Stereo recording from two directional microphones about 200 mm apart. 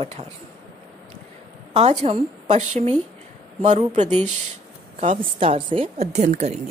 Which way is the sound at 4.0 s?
35° right (ahead or behind).